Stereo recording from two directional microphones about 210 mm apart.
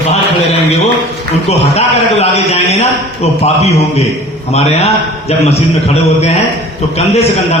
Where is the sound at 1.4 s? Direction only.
30° left (ahead or behind).